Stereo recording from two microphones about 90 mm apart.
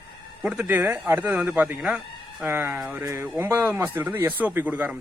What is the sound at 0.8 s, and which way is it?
A man's voice, 25° right (ahead or behind).